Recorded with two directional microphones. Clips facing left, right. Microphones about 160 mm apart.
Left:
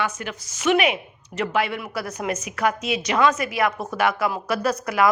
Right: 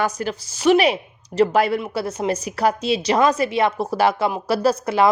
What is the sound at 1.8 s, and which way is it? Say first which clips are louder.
A woman's voice: right 5 dB; 25° right (ahead or behind).